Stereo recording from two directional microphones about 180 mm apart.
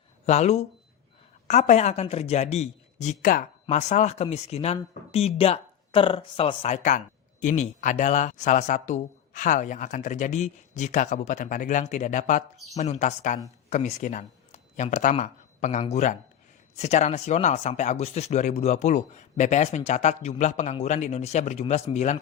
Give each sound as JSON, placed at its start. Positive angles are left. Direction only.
{"t": 0.3, "sound": "speech", "side_deg": 35}